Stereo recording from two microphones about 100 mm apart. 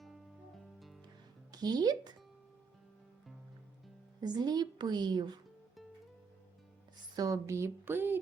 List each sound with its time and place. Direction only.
1.5 s speech: 40° right (ahead or behind)
4.2 s a woman's voice: 45° right (ahead or behind)
7.2 s speech: 35° right (ahead or behind)